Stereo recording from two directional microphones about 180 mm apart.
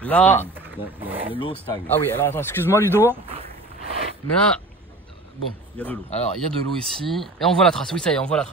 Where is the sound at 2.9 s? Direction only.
10° right (ahead or behind).